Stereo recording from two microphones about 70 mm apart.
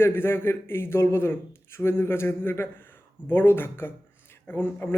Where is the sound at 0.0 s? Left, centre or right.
Left.